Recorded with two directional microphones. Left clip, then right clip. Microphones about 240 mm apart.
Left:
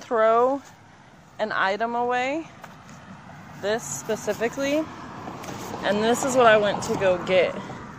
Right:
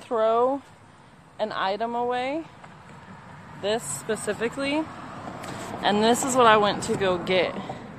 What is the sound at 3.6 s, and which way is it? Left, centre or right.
A woman's voice, centre.